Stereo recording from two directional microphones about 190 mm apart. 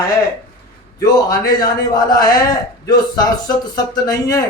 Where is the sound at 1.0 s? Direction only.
20° left (ahead or behind).